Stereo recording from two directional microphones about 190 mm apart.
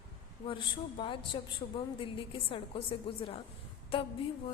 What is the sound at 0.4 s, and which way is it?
A woman's voice, 25° left (ahead or behind).